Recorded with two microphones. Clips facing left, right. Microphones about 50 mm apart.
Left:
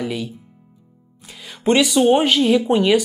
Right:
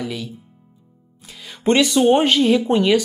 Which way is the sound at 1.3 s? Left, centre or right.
Centre.